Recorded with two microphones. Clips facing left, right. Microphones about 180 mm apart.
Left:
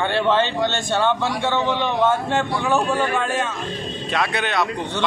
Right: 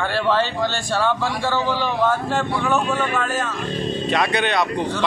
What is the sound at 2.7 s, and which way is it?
Speech, 30° left (ahead or behind).